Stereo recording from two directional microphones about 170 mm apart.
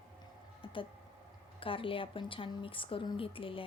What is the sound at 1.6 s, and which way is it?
A woman's voice, 30° left (ahead or behind).